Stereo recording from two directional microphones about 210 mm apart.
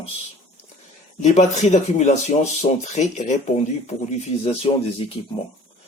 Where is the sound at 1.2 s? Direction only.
35° left (ahead or behind).